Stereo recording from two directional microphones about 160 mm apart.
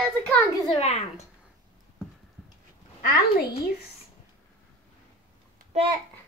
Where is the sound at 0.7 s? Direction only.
40° left (ahead or behind).